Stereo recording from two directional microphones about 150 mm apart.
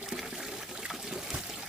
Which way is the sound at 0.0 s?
5° right (ahead or behind).